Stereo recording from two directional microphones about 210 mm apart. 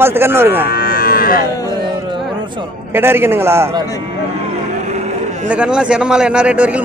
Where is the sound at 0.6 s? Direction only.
45° left (ahead or behind).